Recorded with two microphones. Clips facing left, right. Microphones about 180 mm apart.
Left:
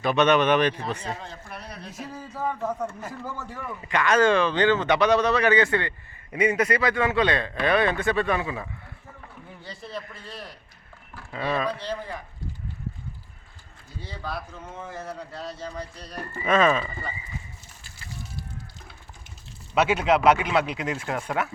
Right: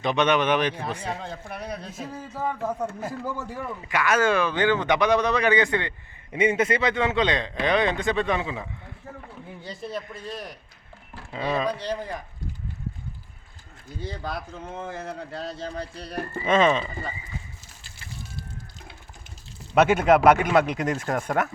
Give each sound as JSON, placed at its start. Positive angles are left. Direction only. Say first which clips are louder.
{"t": 0.0, "sound": "a man's voice", "louder": "left 2 dB", "side_deg": -15}
{"t": 1.3, "sound": "speech", "louder": "right 6 dB", "side_deg": -55}
{"t": 2.1, "sound": "a man's voice", "louder": "even", "side_deg": -5}
{"t": 14.2, "sound": "a man's voice", "louder": "right 1 dB", "side_deg": -20}
{"t": 19.7, "sound": "speech", "louder": "right 3 dB", "side_deg": -50}